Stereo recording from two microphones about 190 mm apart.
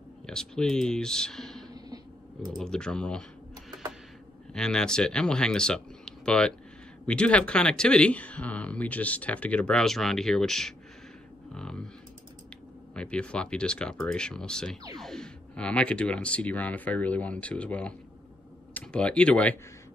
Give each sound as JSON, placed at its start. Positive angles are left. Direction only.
{"t": 0.3, "sound": "speech", "side_deg": 5}
{"t": 4.6, "sound": "speech", "side_deg": 5}
{"t": 11.5, "sound": "a sound", "side_deg": 5}
{"t": 12.9, "sound": "speech", "side_deg": 5}